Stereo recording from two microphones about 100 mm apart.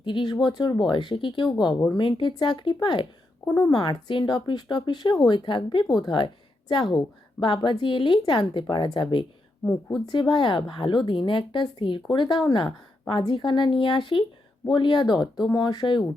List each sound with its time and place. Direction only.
0.0 s a woman's voice: 55° left (ahead or behind)
3.4 s speech: 25° left (ahead or behind)
3.7 s a woman's voice: 50° left (ahead or behind)